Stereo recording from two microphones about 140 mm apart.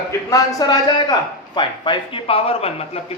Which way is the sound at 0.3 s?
25° left (ahead or behind).